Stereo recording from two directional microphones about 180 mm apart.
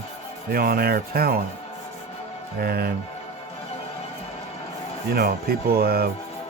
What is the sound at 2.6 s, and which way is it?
Speech, 55° right (ahead or behind).